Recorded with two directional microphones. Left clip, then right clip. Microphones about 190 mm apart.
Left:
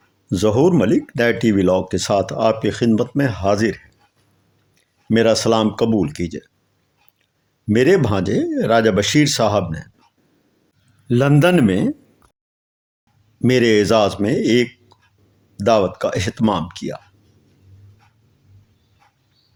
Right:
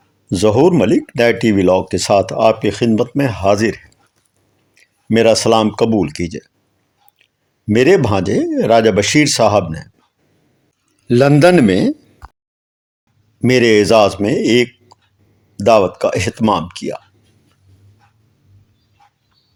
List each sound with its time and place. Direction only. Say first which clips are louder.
0.3 s speech: right 4 dB; 30° right (ahead or behind)
7.7 s speech: right 4 dB; 30° right (ahead or behind)
11.1 s speech: right 6 dB; 35° right (ahead or behind)
13.4 s speech: right 4 dB; 30° right (ahead or behind)